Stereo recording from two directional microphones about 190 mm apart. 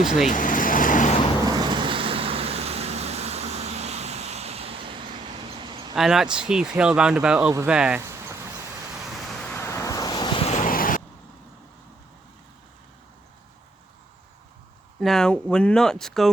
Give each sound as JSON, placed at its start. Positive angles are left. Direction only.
{"t": 0.3, "sound": "vehicle", "side_deg": 45}
{"t": 1.5, "sound": "vehicle", "side_deg": -20}
{"t": 5.9, "sound": "speech", "side_deg": 0}
{"t": 7.7, "sound": "a sound", "side_deg": -5}
{"t": 9.4, "sound": "vehicle", "side_deg": 10}
{"t": 15.0, "sound": "speech", "side_deg": 5}